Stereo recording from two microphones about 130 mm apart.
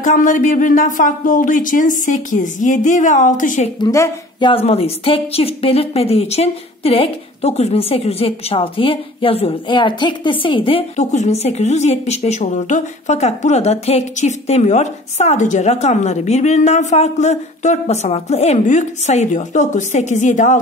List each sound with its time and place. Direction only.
0.0 s speech: 85° left
3.8 s speech: 25° left (ahead or behind)
4.4 s a woman's voice: 45° left (ahead or behind)
11.0 s a woman's voice: 65° left (ahead or behind)